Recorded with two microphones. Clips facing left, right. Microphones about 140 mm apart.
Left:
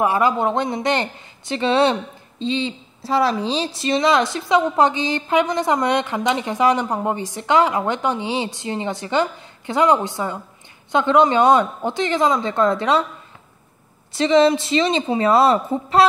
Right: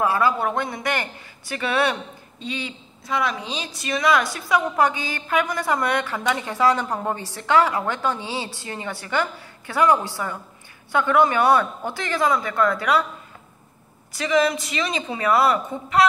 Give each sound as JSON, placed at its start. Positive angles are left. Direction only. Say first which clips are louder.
{"t": 0.0, "sound": "speech", "louder": "left 3 dB", "side_deg": 20}
{"t": 14.1, "sound": "speech", "louder": "left 6 dB", "side_deg": 25}